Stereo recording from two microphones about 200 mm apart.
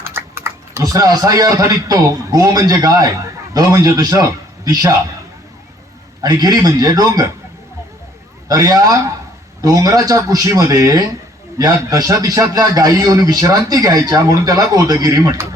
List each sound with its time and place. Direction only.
0.0 s a man's voice: 10° right (ahead or behind)
6.2 s a man's voice: 20° right (ahead or behind)
8.4 s speech: 20° right (ahead or behind)